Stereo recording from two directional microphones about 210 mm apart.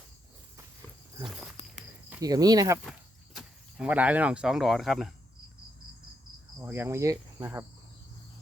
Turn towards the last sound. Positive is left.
turn(degrees=-15)  # may be behind; listen again after turning